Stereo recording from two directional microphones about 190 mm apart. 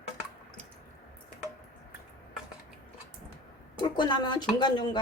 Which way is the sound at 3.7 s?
25° left (ahead or behind).